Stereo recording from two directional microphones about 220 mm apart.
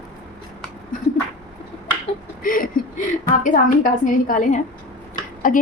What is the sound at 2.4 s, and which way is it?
A woman's voice, 40° left (ahead or behind).